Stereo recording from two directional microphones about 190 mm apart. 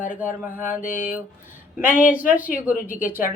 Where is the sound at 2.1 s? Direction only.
10° right (ahead or behind).